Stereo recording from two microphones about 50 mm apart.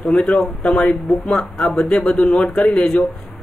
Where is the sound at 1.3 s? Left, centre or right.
Centre.